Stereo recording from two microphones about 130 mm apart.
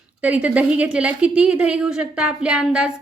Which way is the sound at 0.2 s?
10° right (ahead or behind).